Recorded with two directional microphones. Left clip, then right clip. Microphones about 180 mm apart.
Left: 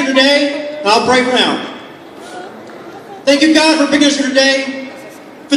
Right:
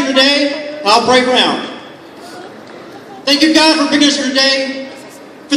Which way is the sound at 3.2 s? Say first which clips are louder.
Even; 55° left (ahead or behind).